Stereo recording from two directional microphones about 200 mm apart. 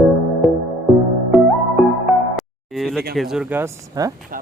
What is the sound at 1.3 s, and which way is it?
Music, 10° right (ahead or behind).